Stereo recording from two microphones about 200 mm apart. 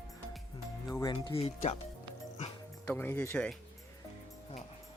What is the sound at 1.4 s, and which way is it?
Speech, 30° left (ahead or behind).